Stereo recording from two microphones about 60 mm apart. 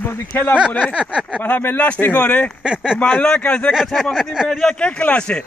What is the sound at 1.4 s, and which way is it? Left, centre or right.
Speech, left.